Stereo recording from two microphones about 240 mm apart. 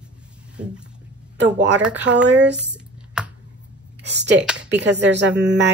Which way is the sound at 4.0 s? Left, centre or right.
Right.